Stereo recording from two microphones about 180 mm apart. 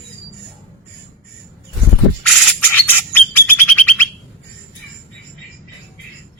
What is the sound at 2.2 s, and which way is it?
Bird, centre (ahead or behind).